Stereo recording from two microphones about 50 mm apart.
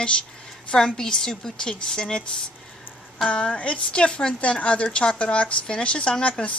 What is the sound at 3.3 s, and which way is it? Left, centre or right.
A woman's voice, left.